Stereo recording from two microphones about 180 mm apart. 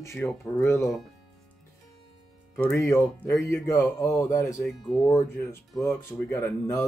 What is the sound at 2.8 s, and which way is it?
Speech, 15° left (ahead or behind).